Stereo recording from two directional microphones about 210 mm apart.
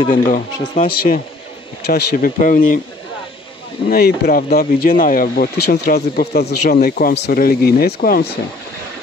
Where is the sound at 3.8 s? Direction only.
45° left (ahead or behind).